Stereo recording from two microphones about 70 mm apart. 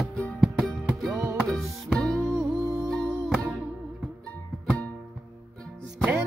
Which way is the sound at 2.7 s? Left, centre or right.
Right.